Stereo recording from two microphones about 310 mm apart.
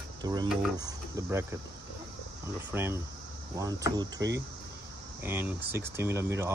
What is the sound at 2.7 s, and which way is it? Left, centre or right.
Speech, centre.